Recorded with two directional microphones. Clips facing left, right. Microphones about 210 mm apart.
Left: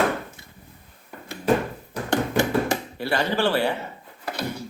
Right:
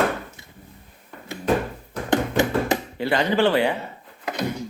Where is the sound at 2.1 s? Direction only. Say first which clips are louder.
Right 1 dB; 20° right (ahead or behind).